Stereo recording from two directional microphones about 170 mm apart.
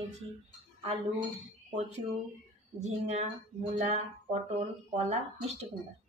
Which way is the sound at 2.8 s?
40° right (ahead or behind).